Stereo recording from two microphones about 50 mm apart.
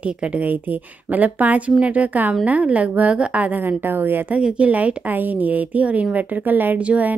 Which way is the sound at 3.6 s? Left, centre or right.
Right.